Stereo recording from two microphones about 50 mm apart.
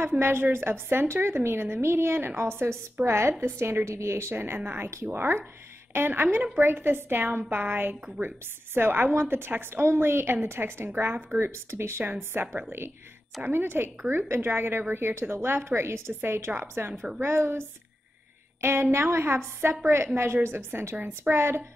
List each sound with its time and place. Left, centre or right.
0.2 s a woman's voice: right
4.4 s a woman's voice: right
11.3 s a woman's voice: right
12.0 s a woman's voice: right